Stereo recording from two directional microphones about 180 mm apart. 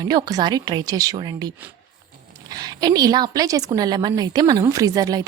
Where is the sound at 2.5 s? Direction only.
20° right (ahead or behind).